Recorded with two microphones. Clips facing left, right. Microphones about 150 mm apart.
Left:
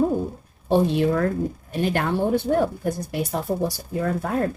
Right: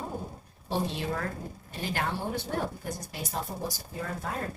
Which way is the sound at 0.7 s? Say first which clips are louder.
Left 12 dB; 55° left (ahead or behind).